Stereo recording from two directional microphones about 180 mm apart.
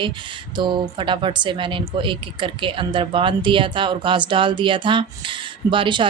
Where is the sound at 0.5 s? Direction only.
25° right (ahead or behind).